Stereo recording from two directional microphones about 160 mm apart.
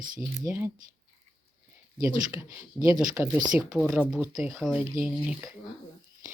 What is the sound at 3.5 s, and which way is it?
Speech, centre (ahead or behind).